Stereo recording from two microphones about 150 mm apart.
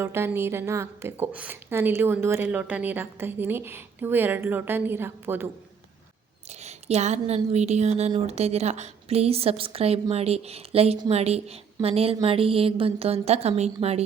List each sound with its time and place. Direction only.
0.0 s a woman's voice: 15° right (ahead or behind)
6.5 s a woman's voice: 50° right (ahead or behind)